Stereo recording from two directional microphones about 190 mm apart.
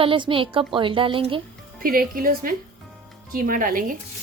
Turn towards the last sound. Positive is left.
turn(degrees=-45)  # may be behind; listen again after turning